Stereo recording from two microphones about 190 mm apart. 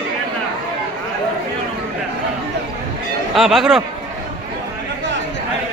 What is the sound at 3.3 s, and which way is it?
Speech, centre (ahead or behind).